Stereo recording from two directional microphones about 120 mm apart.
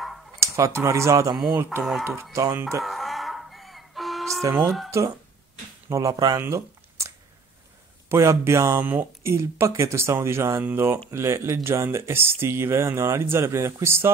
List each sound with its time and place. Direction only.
0.4 s speech: 25° right (ahead or behind)
1.8 s speech: centre (ahead or behind)
2.3 s speech: 25° right (ahead or behind)
2.8 s music: centre (ahead or behind)
4.4 s speech: 30° right (ahead or behind)
4.6 s speech: 5° left (ahead or behind)
5.9 s speech: 30° right (ahead or behind)
6.4 s a sound: 25° right (ahead or behind)
8.1 s speech: 25° right (ahead or behind)